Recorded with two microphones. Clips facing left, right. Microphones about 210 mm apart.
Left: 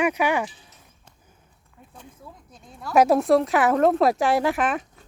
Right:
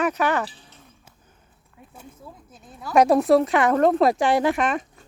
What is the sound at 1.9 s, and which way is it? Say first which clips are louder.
Speech: right 1 dB; 5° right (ahead or behind).